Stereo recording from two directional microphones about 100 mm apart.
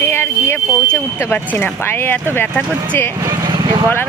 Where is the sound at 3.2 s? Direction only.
40° right (ahead or behind).